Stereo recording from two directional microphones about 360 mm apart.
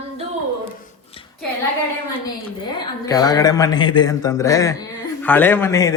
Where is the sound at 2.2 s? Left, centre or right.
Centre.